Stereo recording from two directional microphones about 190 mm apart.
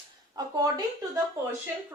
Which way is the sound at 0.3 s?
20° right (ahead or behind).